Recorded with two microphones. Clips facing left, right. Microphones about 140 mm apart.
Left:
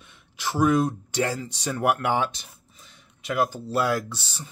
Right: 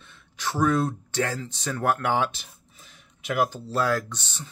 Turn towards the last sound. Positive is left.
turn(degrees=10)  # may be behind; listen again after turning